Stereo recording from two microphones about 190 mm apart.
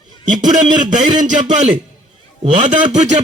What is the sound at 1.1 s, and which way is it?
A man's voice, 40° right (ahead or behind).